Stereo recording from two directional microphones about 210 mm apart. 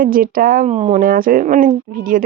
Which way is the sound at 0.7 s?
30° right (ahead or behind).